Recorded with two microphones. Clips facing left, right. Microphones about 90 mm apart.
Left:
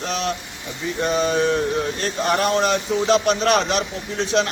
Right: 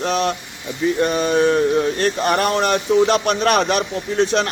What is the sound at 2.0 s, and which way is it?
A man's voice, 55° right (ahead or behind).